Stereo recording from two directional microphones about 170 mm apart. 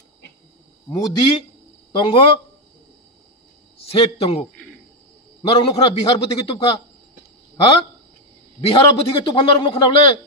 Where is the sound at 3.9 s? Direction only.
35° left (ahead or behind).